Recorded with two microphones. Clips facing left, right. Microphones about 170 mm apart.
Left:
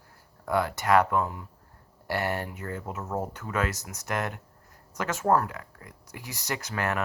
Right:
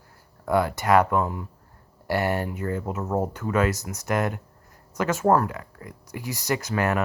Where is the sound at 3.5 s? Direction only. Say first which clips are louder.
Right 7 dB; 10° right (ahead or behind).